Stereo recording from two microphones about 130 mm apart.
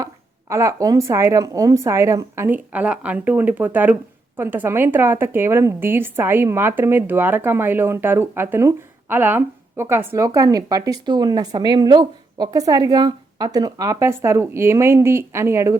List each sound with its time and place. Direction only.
0.0 s a woman's voice: 25° right (ahead or behind)